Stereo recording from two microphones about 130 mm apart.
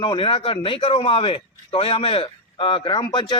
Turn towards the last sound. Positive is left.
turn(degrees=35)  # may be behind; listen again after turning